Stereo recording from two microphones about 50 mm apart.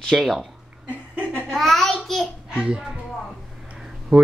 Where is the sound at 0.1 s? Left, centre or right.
Centre.